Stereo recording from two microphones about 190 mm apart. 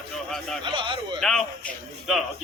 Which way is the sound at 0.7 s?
25° right (ahead or behind).